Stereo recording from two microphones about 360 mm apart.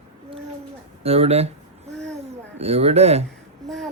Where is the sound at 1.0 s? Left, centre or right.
Centre.